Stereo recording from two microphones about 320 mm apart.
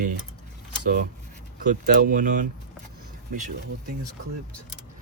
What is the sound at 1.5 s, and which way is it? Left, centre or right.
Speech, right.